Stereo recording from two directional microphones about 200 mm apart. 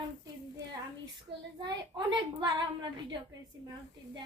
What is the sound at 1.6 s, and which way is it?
A woman's voice, 20° right (ahead or behind).